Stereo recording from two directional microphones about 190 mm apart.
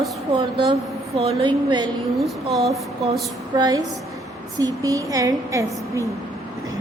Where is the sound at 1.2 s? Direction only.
25° right (ahead or behind).